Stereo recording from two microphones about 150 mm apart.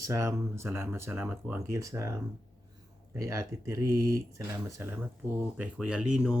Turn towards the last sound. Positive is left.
turn(degrees=-5)  # may be behind; listen again after turning